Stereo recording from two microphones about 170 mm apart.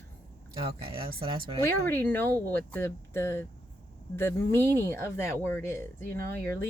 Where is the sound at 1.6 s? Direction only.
15° left (ahead or behind).